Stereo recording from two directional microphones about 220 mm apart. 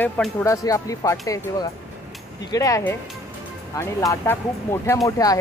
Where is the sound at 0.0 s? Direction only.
10° left (ahead or behind).